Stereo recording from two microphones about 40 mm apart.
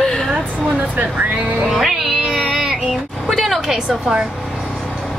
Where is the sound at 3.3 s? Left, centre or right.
Centre.